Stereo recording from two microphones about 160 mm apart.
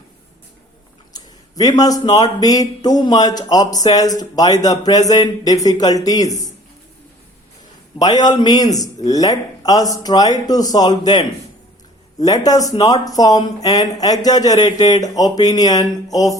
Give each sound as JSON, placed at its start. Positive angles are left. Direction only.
{"t": 1.1, "sound": "speech", "side_deg": 25}
{"t": 7.9, "sound": "speech", "side_deg": 25}